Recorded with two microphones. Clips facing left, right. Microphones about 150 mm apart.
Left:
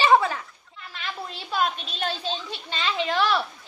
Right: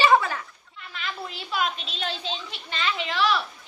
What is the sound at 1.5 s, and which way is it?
A woman's voice, 40° left (ahead or behind).